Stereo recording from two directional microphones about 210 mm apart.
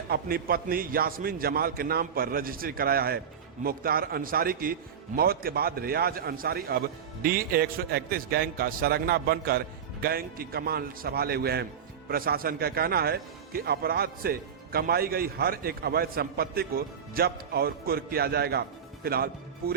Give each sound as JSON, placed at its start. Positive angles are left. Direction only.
{"t": 0.1, "sound": "a man's voice", "side_deg": -45}